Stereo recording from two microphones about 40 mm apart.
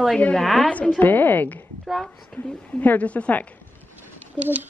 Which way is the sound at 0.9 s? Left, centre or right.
Left.